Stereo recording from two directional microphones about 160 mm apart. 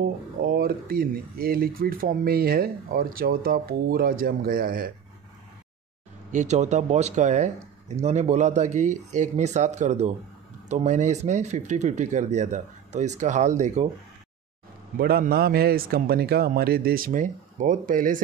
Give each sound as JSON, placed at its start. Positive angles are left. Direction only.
{"t": 0.4, "sound": "speech", "side_deg": -65}
{"t": 6.3, "sound": "speech", "side_deg": -45}
{"t": 15.0, "sound": "speech", "side_deg": -70}